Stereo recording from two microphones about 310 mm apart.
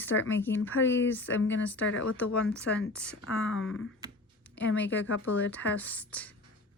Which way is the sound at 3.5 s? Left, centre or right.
Left.